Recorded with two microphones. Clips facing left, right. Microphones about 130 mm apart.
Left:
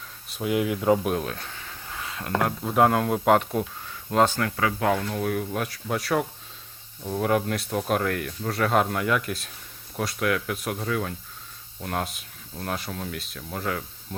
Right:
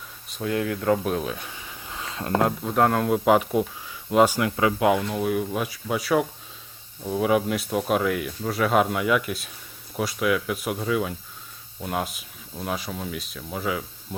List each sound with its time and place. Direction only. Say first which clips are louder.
0.3 s speech: left 1 dB; 15° left (ahead or behind)
1.1 s a sound: right 1 dB; 5° right (ahead or behind); by 2.5 s 25° right (ahead or behind)
2.6 s speech: left 1 dB; 5° left (ahead or behind)